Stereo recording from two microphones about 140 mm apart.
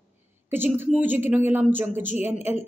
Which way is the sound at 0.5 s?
15° right (ahead or behind).